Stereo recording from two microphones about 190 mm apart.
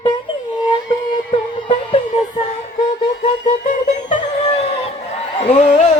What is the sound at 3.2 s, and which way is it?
Music, 40° left (ahead or behind).